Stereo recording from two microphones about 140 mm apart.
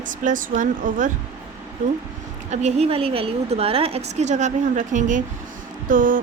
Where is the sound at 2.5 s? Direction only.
50° right (ahead or behind).